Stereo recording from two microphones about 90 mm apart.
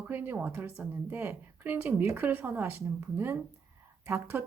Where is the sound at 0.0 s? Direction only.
20° right (ahead or behind).